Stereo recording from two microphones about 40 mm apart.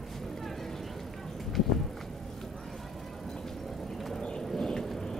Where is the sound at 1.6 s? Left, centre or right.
Centre.